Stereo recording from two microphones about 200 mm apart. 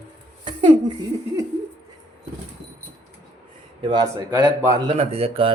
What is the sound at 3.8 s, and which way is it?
Speech, 20° right (ahead or behind).